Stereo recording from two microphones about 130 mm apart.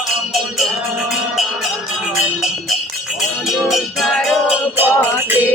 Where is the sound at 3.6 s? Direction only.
Centre (ahead or behind).